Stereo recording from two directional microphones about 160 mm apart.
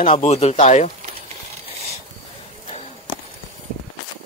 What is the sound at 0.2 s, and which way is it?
Speech, 40° left (ahead or behind).